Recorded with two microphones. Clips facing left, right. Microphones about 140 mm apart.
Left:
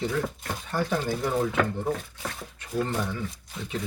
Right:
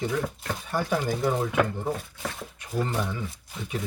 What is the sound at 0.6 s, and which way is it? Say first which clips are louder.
Speech: even; 10° right (ahead or behind).